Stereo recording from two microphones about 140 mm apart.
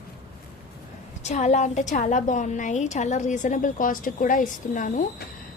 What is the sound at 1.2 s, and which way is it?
A woman's voice, 55° left (ahead or behind).